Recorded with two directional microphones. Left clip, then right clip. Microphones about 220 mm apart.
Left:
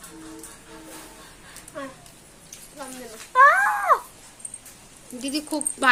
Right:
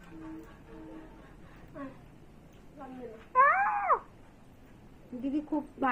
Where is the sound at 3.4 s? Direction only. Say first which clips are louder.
Left 11 dB; centre (ahead or behind).